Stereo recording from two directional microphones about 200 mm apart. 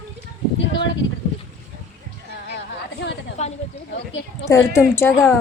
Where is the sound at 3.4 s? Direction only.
35° left (ahead or behind).